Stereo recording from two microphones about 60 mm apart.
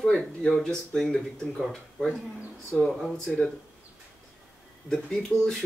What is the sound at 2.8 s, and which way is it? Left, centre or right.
Speech, centre.